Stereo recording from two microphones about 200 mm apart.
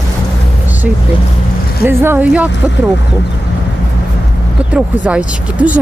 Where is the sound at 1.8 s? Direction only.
10° right (ahead or behind).